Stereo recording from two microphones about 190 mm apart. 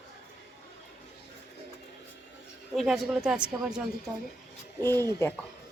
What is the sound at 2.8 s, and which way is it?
A woman's voice, centre (ahead or behind).